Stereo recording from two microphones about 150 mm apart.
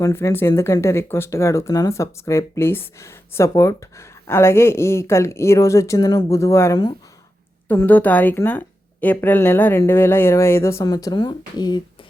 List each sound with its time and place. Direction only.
0.0 s speech: 15° left (ahead or behind)
7.7 s speech: 10° left (ahead or behind); by 11.8 s 30° left (ahead or behind)